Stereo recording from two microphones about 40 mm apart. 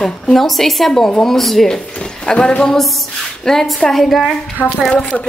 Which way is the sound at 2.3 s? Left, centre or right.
Left.